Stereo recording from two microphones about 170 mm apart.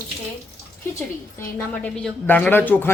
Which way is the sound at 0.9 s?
15° left (ahead or behind).